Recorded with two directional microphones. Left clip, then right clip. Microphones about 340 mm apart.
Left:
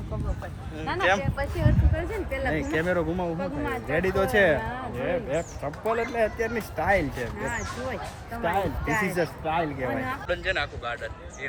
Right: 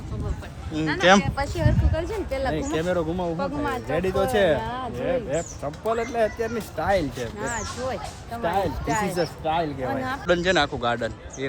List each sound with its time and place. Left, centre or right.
1.0 s speech: right
2.5 s speech: centre